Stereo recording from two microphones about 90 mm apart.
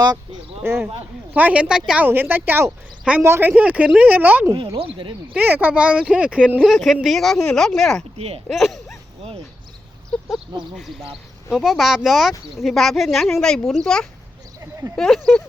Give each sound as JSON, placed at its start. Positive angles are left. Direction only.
{"t": 1.3, "sound": "speech", "side_deg": -15}
{"t": 2.0, "sound": "a woman's voice", "side_deg": -25}
{"t": 3.6, "sound": "a woman's voice", "side_deg": -15}
{"t": 4.5, "sound": "speech", "side_deg": -80}
{"t": 5.3, "sound": "speech", "side_deg": -20}
{"t": 6.7, "sound": "speech", "side_deg": 0}
{"t": 10.1, "sound": "sheep", "side_deg": 0}
{"t": 11.5, "sound": "speech", "side_deg": -5}